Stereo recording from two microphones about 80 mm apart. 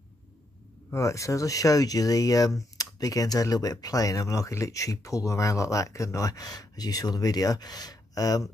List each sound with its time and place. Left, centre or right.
0.8 s speech: left